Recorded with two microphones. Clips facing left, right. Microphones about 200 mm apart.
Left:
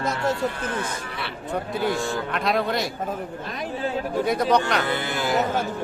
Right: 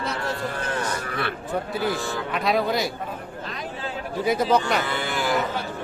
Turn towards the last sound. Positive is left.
turn(degrees=45)  # may be behind; listen again after turning